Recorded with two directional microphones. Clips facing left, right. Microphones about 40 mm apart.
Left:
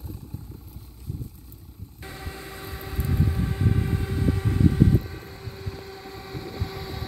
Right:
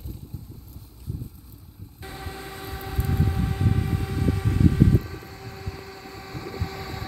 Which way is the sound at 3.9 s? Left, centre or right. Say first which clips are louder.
Even; centre.